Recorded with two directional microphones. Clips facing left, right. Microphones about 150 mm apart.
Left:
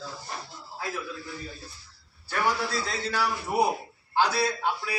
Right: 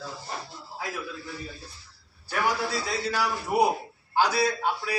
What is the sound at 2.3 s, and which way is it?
A man's voice, 10° right (ahead or behind).